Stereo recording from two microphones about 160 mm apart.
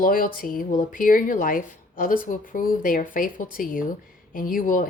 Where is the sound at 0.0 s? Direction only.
60° left (ahead or behind).